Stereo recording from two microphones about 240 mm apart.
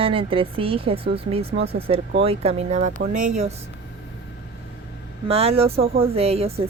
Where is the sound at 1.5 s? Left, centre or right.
Right.